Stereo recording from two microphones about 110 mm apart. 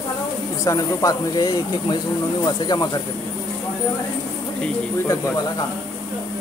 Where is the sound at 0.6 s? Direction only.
30° left (ahead or behind).